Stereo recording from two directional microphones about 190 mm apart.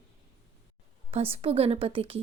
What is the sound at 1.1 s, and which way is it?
Speech, 30° right (ahead or behind).